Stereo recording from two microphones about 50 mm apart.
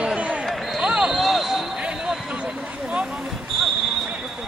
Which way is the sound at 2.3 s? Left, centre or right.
Centre.